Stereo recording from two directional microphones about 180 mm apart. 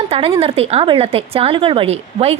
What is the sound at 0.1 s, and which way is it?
Speech, 30° right (ahead or behind).